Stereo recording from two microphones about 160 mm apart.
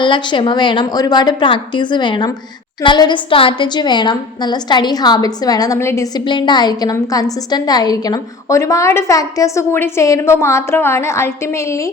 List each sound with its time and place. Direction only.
0.0 s a woman's voice: 30° left (ahead or behind)